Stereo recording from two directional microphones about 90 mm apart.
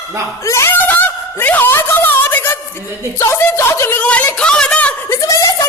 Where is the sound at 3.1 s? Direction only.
25° left (ahead or behind).